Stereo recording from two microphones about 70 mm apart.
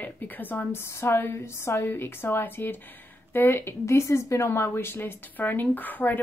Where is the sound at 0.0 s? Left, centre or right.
Left.